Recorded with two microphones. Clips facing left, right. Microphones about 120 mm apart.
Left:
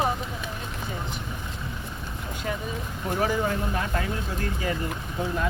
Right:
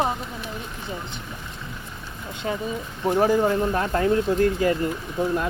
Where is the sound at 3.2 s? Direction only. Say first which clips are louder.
Right 6 dB; 40° right (ahead or behind).